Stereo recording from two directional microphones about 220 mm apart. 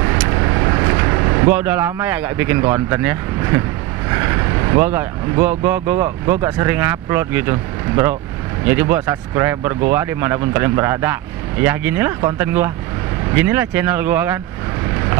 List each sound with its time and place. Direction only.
0.3 s vehicle: 20° right (ahead or behind)
1.5 s speech: 10° right (ahead or behind)